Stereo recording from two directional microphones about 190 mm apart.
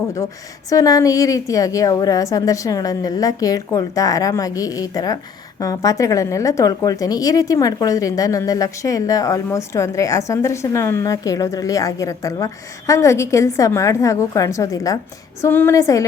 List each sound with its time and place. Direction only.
0.7 s a woman's voice: 15° left (ahead or behind)